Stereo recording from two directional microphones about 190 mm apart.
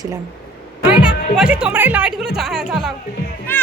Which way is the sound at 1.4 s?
5° right (ahead or behind).